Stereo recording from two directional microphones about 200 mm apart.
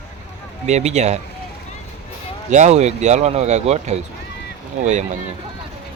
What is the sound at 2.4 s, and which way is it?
Speech, 35° right (ahead or behind).